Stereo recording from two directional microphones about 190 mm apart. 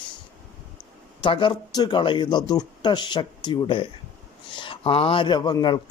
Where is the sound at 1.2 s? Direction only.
25° left (ahead or behind).